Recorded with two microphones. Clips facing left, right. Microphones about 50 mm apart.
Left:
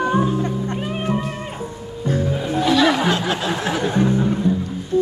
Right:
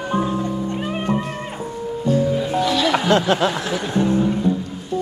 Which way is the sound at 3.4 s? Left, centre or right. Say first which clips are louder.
Left 1 dB; left.